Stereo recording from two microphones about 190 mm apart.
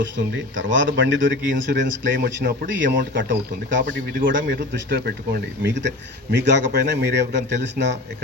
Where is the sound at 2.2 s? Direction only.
60° right (ahead or behind).